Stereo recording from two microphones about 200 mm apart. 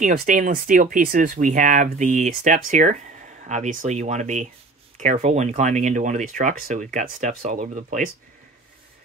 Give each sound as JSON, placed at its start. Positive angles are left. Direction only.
{"t": 0.0, "sound": "speech", "side_deg": -45}